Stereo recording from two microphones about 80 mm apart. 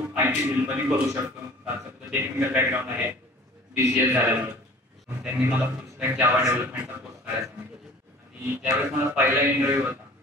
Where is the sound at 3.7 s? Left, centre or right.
Right.